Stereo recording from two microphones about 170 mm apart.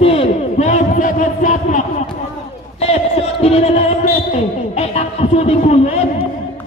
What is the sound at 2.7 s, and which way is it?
Speech, 40° left (ahead or behind).